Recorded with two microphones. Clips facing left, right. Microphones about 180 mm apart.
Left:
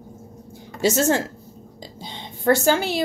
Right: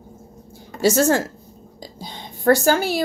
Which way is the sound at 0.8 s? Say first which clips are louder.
Right 2 dB; 20° left (ahead or behind).